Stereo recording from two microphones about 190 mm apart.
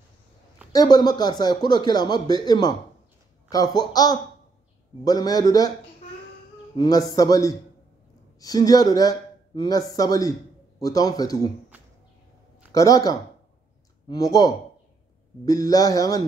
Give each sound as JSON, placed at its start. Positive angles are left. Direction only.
{"t": 0.7, "sound": "speech", "side_deg": 20}
{"t": 6.8, "sound": "speech", "side_deg": 20}
{"t": 12.7, "sound": "speech", "side_deg": 20}